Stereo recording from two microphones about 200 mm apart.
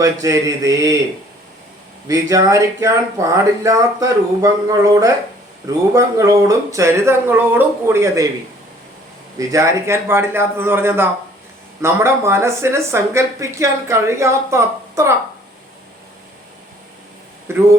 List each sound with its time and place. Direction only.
0.0 s speech: 15° right (ahead or behind)
2.0 s speech: 15° right (ahead or behind)
9.4 s speech: 15° right (ahead or behind)
17.5 s speech: 10° right (ahead or behind)